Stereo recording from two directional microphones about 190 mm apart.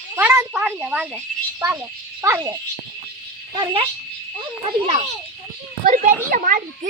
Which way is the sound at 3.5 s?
25° right (ahead or behind).